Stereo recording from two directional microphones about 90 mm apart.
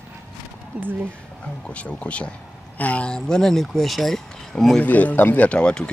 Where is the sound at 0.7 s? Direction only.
15° right (ahead or behind).